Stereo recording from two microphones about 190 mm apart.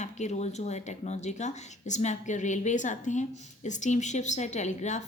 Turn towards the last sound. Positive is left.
turn(degrees=40)  # may be behind; listen again after turning